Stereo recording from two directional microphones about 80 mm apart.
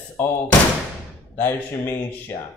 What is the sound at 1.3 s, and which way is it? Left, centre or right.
Speech, left.